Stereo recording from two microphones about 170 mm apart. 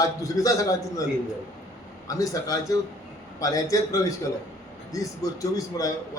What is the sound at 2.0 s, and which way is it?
A man's voice, 20° left (ahead or behind).